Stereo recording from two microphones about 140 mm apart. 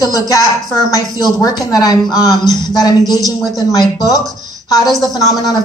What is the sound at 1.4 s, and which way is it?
Speech, 25° left (ahead or behind).